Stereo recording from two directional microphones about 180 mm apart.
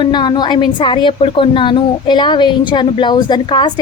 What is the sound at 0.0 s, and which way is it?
Speech, 25° left (ahead or behind).